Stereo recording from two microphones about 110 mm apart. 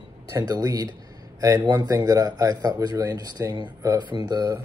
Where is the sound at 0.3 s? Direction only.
35° right (ahead or behind).